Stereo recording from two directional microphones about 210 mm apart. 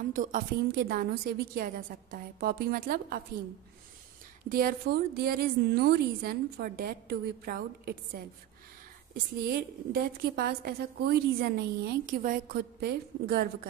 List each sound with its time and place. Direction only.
0.1 s a woman's voice: 40° right (ahead or behind)
4.5 s a woman's voice: 45° right (ahead or behind)